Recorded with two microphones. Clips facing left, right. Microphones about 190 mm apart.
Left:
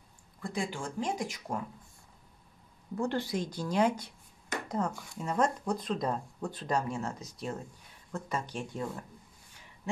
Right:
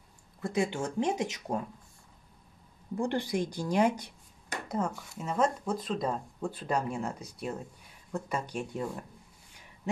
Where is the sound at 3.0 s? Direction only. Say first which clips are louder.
Right 2 dB; 15° right (ahead or behind).